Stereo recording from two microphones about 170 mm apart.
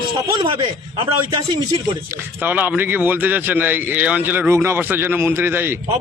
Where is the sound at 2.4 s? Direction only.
10° right (ahead or behind).